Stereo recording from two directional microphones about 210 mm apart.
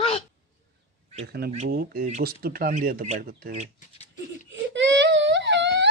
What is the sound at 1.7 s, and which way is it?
Speech, 45° right (ahead or behind).